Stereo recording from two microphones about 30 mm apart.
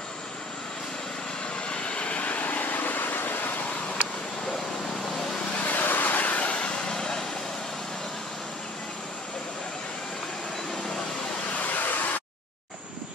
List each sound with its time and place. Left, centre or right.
1.7 s vehicle: left
5.6 s vehicle: left
6.2 s vehicle: left
6.7 s vehicle: left
11.6 s vehicle: left